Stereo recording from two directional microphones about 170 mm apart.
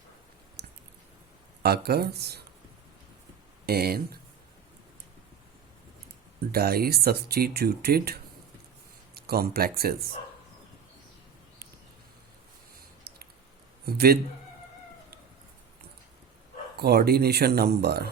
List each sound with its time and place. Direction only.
1.6 s speech: 70° right (ahead or behind)
3.7 s speech: 65° right (ahead or behind)
6.5 s speech: 65° right (ahead or behind)
13.1 s a sound: 65° right (ahead or behind)
13.8 s speech: 65° right (ahead or behind)
16.7 s speech: 70° right (ahead or behind)